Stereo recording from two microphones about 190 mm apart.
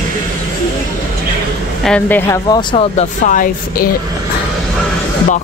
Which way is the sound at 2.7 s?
35° left (ahead or behind).